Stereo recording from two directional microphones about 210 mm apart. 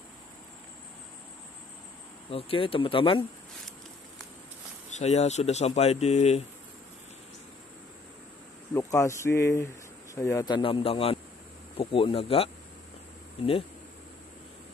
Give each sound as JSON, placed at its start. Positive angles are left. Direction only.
{"t": 2.3, "sound": "a man's voice", "side_deg": 25}
{"t": 4.9, "sound": "speech", "side_deg": 30}
{"t": 8.7, "sound": "a man's voice", "side_deg": 15}